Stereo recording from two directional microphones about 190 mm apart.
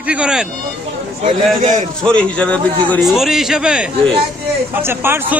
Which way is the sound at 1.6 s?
40° right (ahead or behind).